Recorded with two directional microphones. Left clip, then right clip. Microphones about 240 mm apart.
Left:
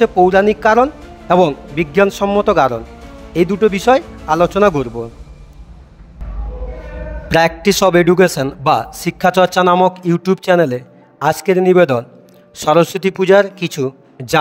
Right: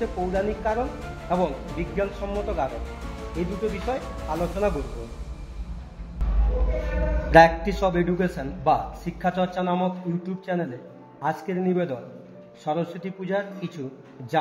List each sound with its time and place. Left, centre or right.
0.0 s a man's voice: left
3.9 s a man's voice: left
7.2 s a man's voice: left